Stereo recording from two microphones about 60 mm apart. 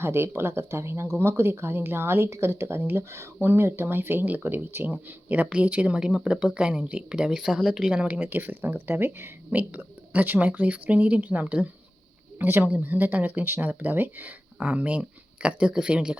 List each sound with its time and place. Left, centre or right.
0.0 s speech: right
8.3 s speech: right
12.4 s speech: right; by 16.1 s centre